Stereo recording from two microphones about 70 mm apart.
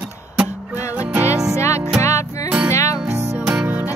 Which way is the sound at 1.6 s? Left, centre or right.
Left.